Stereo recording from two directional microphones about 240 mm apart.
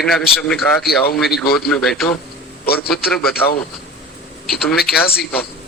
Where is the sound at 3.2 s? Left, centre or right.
Left.